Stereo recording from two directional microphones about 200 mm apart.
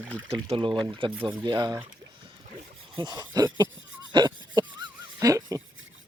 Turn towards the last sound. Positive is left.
turn(degrees=-15)  # may be behind; listen again after turning